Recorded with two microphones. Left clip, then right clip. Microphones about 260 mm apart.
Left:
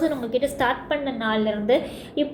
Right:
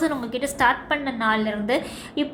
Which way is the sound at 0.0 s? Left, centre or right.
Right.